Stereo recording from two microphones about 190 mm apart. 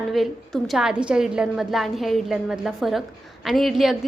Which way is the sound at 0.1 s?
Centre (ahead or behind).